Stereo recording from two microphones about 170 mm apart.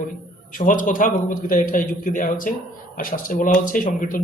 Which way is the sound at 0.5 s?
55° left (ahead or behind).